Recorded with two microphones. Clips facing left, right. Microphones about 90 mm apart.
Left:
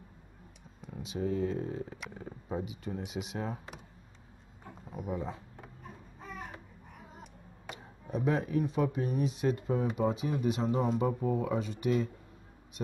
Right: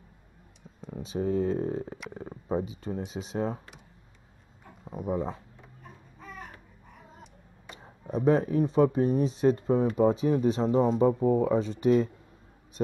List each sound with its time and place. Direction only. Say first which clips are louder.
0.7 s speech: right 5 dB; 35° right (ahead or behind)
4.8 s speech: right 6 dB; 35° right (ahead or behind)
7.7 s speech: right 4 dB; 35° right (ahead or behind)